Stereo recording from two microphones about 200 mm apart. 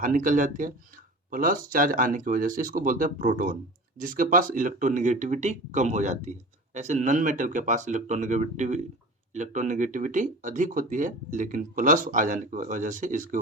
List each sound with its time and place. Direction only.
0.0 s speech: 40° right (ahead or behind)